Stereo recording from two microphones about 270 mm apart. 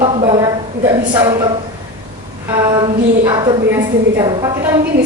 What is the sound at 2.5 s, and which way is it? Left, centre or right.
A woman's voice, centre.